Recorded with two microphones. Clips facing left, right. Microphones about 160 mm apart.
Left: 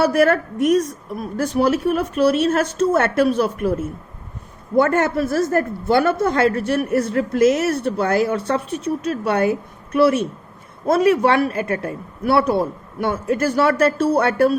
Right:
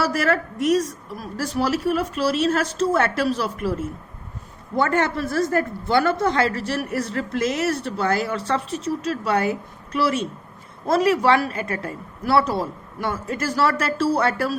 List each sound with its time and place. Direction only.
0.0 s a woman's voice: 55° left (ahead or behind)
8.8 s speech: 30° right (ahead or behind)
9.2 s a woman's voice: 55° left (ahead or behind)